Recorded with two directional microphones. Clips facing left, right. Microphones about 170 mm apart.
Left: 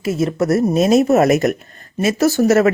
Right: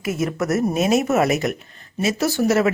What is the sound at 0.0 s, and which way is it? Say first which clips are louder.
Speech: left 5 dB; 30° left (ahead or behind).